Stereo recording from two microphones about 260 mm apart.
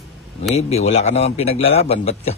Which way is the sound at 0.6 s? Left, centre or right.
Left.